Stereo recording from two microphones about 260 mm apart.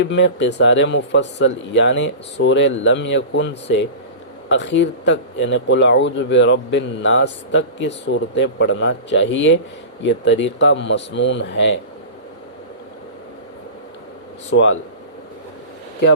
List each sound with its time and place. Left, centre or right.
0.0 s speech: left
14.5 s speech: left